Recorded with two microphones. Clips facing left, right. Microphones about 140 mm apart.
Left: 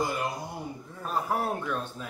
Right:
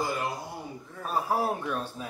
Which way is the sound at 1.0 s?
10° right (ahead or behind).